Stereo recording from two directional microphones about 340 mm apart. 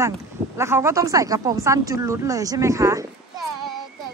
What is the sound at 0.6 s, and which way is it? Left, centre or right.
Speech, centre.